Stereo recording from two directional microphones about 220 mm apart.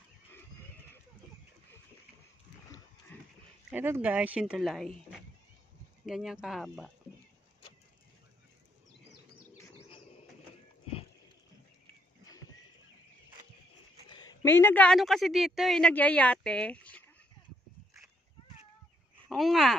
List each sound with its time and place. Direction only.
3.1 s pig: 10° left (ahead or behind)
3.7 s speech: 10° right (ahead or behind)
6.0 s a woman's voice: centre (ahead or behind)
14.0 s a sound: 20° left (ahead or behind)
14.4 s a woman's voice: 10° left (ahead or behind)
19.2 s speech: centre (ahead or behind)